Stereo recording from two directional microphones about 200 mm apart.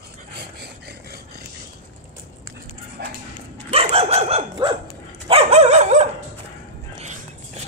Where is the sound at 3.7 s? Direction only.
30° right (ahead or behind).